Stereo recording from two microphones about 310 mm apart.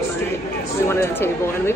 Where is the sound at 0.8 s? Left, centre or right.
Centre.